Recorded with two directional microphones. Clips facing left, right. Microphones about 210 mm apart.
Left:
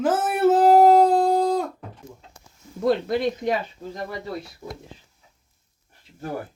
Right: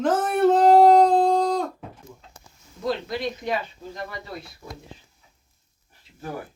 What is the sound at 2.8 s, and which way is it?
Speech, 50° left (ahead or behind).